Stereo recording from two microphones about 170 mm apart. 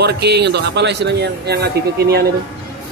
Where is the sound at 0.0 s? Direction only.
75° right (ahead or behind).